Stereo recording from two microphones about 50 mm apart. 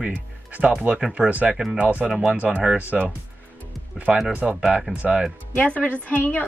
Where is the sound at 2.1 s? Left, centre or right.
Centre.